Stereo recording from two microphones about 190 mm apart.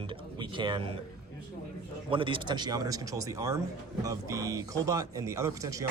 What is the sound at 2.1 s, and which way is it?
Speech, 25° right (ahead or behind).